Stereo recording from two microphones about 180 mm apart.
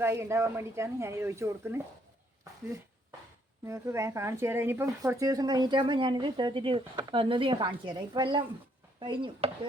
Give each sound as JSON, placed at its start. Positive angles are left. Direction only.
{"t": 0.0, "sound": "speech", "side_deg": -15}
{"t": 3.7, "sound": "speech", "side_deg": -15}